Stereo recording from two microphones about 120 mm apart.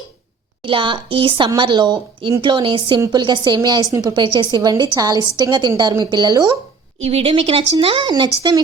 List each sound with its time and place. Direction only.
0.6 s a woman's voice: 45° right (ahead or behind)
7.0 s a woman's voice: 55° right (ahead or behind); by 8.6 s 40° right (ahead or behind)